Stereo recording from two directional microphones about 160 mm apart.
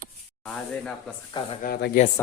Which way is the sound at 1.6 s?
80° left.